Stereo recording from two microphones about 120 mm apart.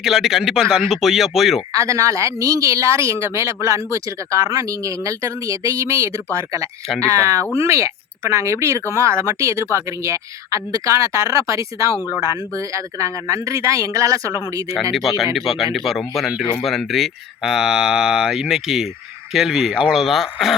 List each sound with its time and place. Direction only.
0.0 s speech: centre (ahead or behind)
1.7 s speech: 25° right (ahead or behind)
15.0 s speech: centre (ahead or behind)